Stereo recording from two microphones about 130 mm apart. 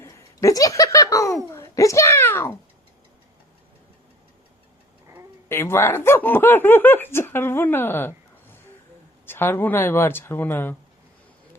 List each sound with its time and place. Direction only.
0.0 s a child's voice: 25° left (ahead or behind)
5.5 s speech: 20° left (ahead or behind)